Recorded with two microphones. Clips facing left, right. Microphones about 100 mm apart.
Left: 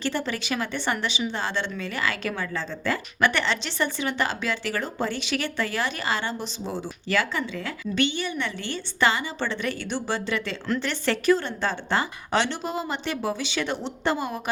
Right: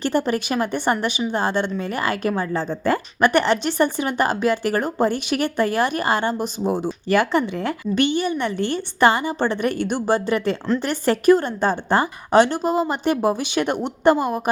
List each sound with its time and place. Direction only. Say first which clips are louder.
0.0 s a woman's voice: right 7 dB; 50° right (ahead or behind)